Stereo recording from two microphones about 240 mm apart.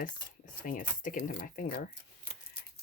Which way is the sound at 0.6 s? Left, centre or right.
Left.